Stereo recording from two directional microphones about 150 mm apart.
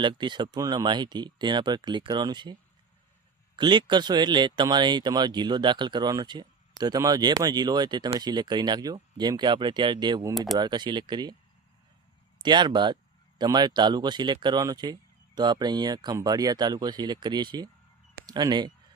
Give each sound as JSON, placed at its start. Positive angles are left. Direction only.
{"t": 0.0, "sound": "speech", "side_deg": -30}
{"t": 12.4, "sound": "speech", "side_deg": -30}